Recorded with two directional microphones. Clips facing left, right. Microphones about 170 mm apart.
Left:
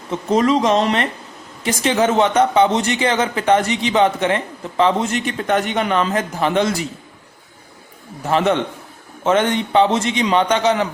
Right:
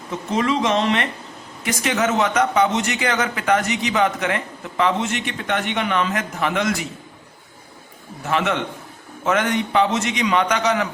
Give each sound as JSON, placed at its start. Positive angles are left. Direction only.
{"t": 0.1, "sound": "speech", "side_deg": 40}
{"t": 8.3, "sound": "a man's voice", "side_deg": 35}